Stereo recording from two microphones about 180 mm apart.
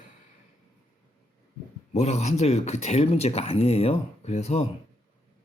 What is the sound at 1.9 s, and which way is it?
Speech, 40° left (ahead or behind).